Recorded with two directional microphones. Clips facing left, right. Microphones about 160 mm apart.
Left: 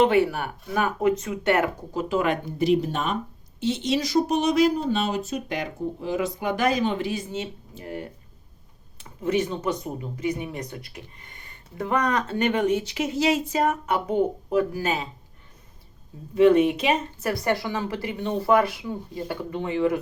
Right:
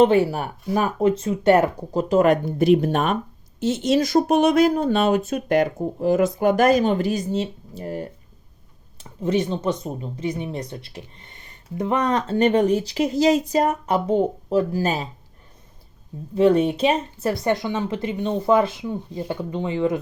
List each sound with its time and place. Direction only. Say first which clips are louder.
0.0 s speech: right 3 dB; 30° right (ahead or behind); by 3.2 s 60° right (ahead or behind)
3.6 s speech: right 5 dB; 45° right (ahead or behind)
16.3 s speech: even; 35° right (ahead or behind)